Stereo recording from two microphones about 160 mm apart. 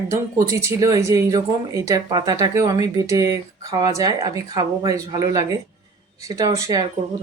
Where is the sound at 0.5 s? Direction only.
20° right (ahead or behind).